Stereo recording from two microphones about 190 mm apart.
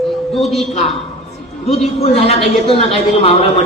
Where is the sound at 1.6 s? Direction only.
30° left (ahead or behind).